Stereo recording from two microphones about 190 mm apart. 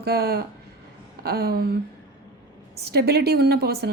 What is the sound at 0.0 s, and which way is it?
A woman's voice, 55° right (ahead or behind).